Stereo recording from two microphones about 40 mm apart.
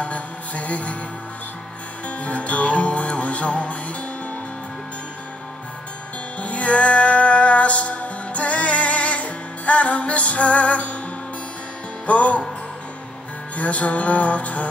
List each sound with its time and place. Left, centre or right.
0.0 s music: left
2.0 s music: left
6.4 s music: left
12.1 s music: left
13.6 s music: left